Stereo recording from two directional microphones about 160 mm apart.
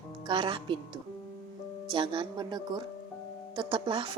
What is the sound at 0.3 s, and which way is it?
Speech, 30° right (ahead or behind).